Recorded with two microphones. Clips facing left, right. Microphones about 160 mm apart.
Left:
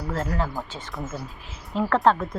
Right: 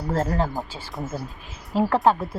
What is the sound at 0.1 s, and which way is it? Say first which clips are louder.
Speech: right 4 dB; 40° right (ahead or behind).